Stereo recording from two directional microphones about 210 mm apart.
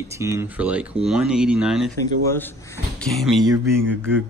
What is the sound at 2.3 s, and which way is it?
Speech, 10° left (ahead or behind).